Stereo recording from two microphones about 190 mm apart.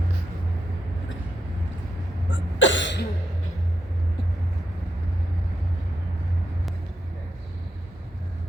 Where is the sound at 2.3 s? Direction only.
80° left.